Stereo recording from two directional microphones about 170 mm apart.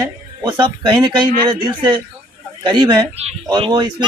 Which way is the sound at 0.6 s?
25° right (ahead or behind).